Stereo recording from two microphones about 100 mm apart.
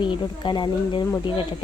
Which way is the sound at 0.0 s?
50° left (ahead or behind).